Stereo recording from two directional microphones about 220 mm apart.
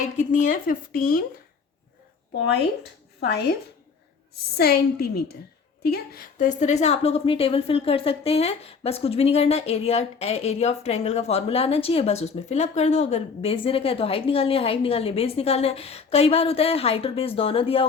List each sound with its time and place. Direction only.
0.0 s speech: 35° left (ahead or behind)
3.2 s a woman's voice: 45° left (ahead or behind)
4.5 s a woman's voice: 45° left (ahead or behind); by 17.8 s 25° left (ahead or behind)